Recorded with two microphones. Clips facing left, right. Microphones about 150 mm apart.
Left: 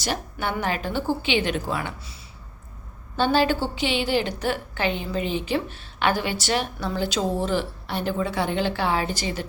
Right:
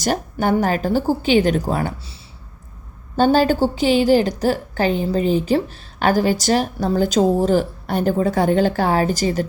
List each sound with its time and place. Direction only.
0.0 s a woman's voice: 45° right (ahead or behind)
3.2 s a woman's voice: 40° right (ahead or behind)